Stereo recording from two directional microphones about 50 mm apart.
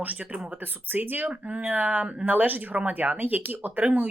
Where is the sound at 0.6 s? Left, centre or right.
Right.